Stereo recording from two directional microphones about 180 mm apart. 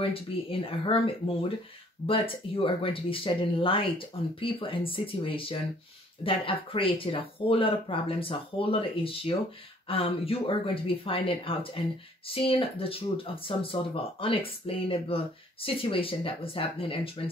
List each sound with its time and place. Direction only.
0.0 s speech: 30° left (ahead or behind)